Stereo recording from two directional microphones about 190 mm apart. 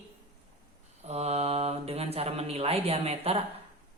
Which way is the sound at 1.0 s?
35° right (ahead or behind).